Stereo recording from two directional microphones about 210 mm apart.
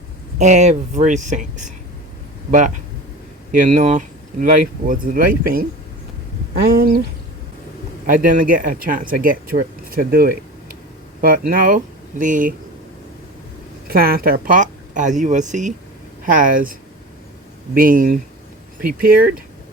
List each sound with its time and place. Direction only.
0.3 s speech: 35° right (ahead or behind)
8.0 s speech: 40° right (ahead or behind)
13.8 s speech: 45° right (ahead or behind)
17.7 s speech: 40° right (ahead or behind)